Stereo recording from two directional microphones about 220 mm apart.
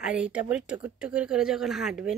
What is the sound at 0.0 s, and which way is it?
A woman's voice, 5° right (ahead or behind).